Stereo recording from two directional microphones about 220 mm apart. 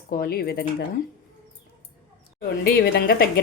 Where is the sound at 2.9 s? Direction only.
45° left (ahead or behind).